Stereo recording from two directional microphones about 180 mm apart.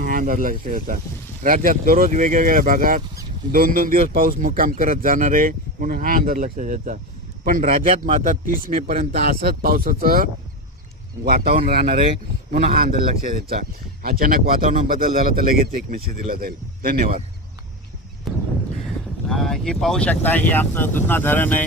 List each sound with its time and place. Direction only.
0.0 s a man's voice: 50° right (ahead or behind)
11.3 s a man's voice: 55° right (ahead or behind)
18.3 s a sound: centre (ahead or behind)
19.3 s speech: centre (ahead or behind)